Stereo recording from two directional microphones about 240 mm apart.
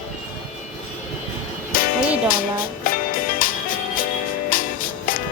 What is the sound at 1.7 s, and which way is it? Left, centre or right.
Music, left.